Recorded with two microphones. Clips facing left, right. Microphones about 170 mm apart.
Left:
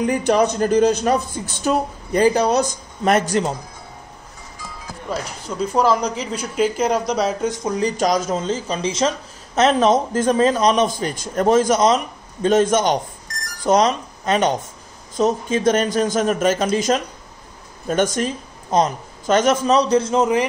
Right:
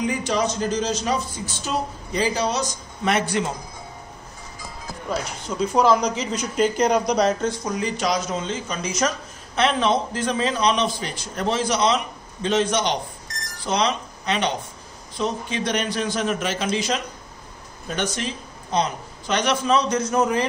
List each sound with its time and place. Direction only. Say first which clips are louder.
0.0 s a man's voice: left 6 dB; 60° left (ahead or behind)
5.1 s speech: left 1 dB; centre (ahead or behind)
7.6 s speech: left 5 dB; 30° left (ahead or behind)
8.0 s speech: left 5 dB; 45° left (ahead or behind); by 9.1 s 30° left (ahead or behind)
9.6 s a man's voice: left 5 dB; 45° left (ahead or behind); by 20.4 s 20° left (ahead or behind)